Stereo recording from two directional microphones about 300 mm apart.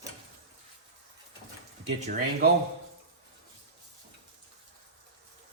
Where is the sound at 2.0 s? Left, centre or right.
Right.